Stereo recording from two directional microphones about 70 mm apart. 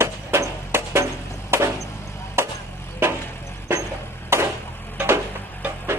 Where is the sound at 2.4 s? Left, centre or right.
Right.